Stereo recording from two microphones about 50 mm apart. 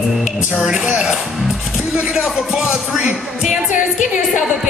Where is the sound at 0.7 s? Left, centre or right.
Centre.